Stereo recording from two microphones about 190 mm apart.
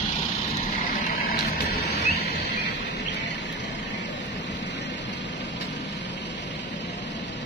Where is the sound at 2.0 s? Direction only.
60° left (ahead or behind).